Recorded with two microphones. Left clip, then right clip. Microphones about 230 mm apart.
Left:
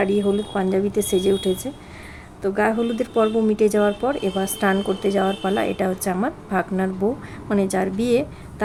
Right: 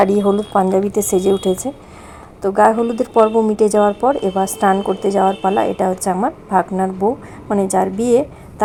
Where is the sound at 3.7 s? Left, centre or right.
Centre.